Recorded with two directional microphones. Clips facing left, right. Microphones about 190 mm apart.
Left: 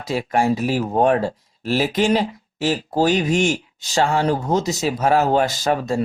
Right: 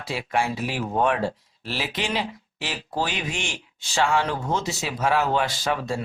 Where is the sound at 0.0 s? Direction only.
40° left (ahead or behind).